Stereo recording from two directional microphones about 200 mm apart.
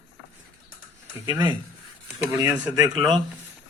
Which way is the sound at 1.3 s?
20° right (ahead or behind).